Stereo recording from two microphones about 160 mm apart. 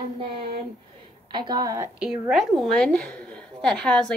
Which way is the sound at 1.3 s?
25° right (ahead or behind).